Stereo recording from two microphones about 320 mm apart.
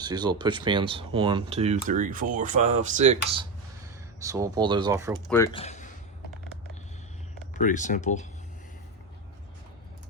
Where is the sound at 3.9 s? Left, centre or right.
Centre.